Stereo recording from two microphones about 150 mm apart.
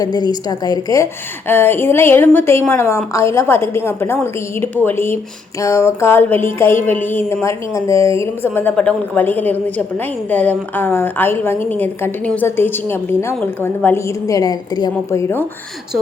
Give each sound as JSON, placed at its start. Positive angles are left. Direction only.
{"t": 0.0, "sound": "a woman's voice", "side_deg": 25}